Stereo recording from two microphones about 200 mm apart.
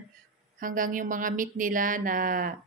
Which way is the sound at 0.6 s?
40° right (ahead or behind).